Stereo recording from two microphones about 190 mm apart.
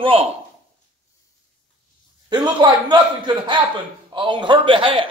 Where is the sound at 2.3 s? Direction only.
25° right (ahead or behind).